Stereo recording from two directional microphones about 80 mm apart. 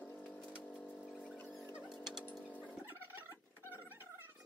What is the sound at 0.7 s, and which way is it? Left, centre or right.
Rodents, centre.